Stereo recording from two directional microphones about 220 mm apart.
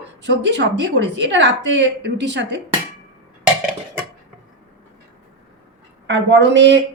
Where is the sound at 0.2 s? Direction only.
50° right (ahead or behind).